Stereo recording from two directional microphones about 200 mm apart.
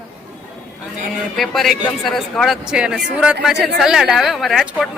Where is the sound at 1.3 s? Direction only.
Centre (ahead or behind).